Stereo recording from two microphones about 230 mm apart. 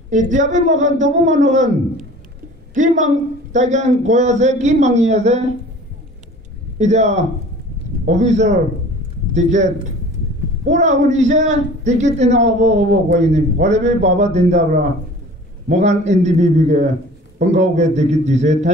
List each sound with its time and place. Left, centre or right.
0.1 s a man's voice: right
6.8 s a man's voice: right
15.7 s a man's voice: right